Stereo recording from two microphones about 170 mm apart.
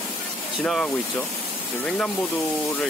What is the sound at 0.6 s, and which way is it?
Speech, 5° left (ahead or behind).